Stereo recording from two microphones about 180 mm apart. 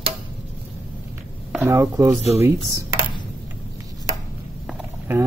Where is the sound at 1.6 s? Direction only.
15° right (ahead or behind).